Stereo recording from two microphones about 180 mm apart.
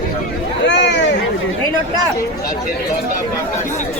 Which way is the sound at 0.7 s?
80° left.